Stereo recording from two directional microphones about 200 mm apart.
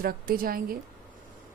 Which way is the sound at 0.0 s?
45° right (ahead or behind).